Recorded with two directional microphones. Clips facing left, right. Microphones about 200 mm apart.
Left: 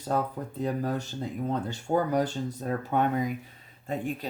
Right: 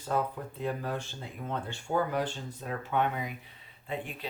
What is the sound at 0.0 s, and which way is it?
Speech, 40° left (ahead or behind).